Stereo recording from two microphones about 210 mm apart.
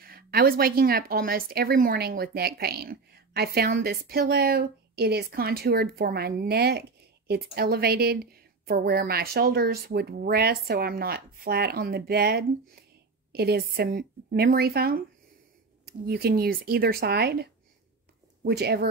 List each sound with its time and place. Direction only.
0.0 s speech: 45° right (ahead or behind)
16.1 s speech: 45° right (ahead or behind)